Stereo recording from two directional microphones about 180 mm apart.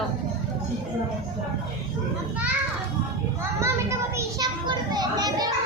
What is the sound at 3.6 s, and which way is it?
Children playing, 15° right (ahead or behind).